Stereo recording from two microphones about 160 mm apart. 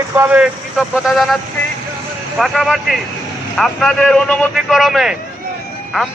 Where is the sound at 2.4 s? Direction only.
Centre (ahead or behind).